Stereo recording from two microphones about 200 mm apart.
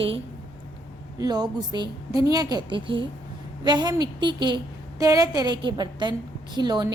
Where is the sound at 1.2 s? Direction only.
20° right (ahead or behind).